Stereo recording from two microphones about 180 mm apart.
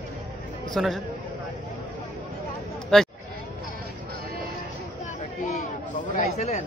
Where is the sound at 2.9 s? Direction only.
5° left (ahead or behind).